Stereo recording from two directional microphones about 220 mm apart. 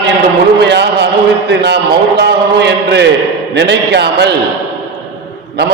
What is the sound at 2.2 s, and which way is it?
A man's voice, 50° right (ahead or behind).